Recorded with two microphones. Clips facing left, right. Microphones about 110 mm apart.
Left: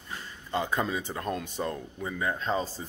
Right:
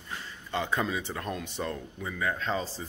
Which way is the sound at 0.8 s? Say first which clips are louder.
Left 1 dB; 35° left (ahead or behind).